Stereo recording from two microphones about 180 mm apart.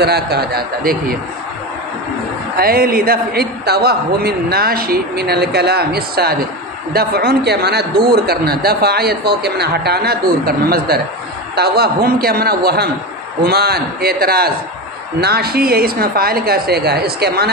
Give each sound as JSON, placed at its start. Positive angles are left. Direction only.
{"t": 0.0, "sound": "a man's voice", "side_deg": -65}
{"t": 2.5, "sound": "a man's voice", "side_deg": -55}